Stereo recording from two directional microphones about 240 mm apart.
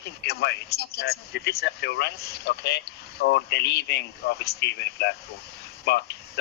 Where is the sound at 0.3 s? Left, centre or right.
Left.